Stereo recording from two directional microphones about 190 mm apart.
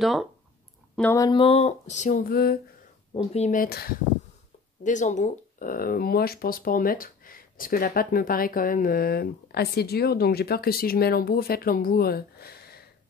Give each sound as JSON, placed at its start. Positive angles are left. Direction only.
{"t": 0.0, "sound": "speech", "side_deg": 0}
{"t": 1.1, "sound": "speech", "side_deg": 20}
{"t": 3.1, "sound": "speech", "side_deg": 35}
{"t": 3.6, "sound": "speech", "side_deg": 55}
{"t": 4.8, "sound": "speech", "side_deg": 40}